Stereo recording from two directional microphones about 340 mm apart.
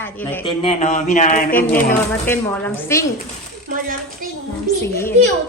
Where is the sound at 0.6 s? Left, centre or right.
Centre.